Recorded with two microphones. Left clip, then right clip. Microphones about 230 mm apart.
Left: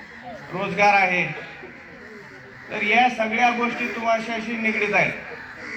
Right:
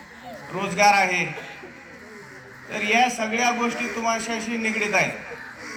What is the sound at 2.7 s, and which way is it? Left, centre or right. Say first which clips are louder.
A man's voice: left 2 dB; right.